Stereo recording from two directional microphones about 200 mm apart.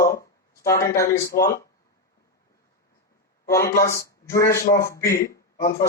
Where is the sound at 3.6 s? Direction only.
50° left (ahead or behind).